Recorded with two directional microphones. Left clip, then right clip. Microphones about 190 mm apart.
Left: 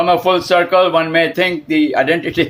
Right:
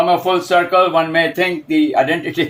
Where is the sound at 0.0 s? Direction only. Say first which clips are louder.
Left 1 dB; 35° left (ahead or behind).